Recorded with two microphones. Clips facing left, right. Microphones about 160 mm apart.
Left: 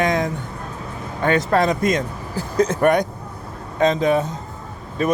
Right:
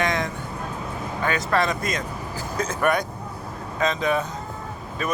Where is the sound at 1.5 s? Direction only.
35° left (ahead or behind).